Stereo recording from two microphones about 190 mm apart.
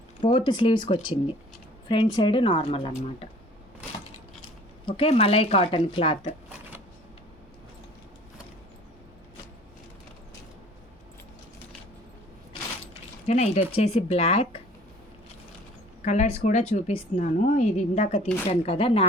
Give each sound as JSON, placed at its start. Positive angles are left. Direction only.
{"t": 0.2, "sound": "a woman's voice", "side_deg": 25}
{"t": 4.9, "sound": "a woman's voice", "side_deg": 30}
{"t": 13.2, "sound": "a woman's voice", "side_deg": 35}
{"t": 16.0, "sound": "a woman's voice", "side_deg": 40}